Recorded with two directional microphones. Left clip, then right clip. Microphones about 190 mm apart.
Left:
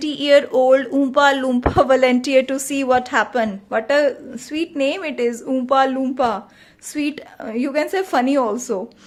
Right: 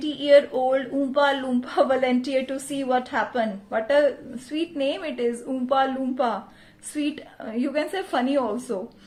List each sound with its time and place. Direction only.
0.0 s speech: 35° left (ahead or behind)